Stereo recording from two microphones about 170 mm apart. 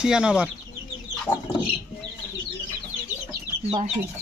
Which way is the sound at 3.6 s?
35° right (ahead or behind).